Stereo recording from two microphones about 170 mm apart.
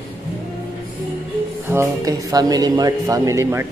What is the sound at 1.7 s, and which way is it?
Speech, 20° right (ahead or behind).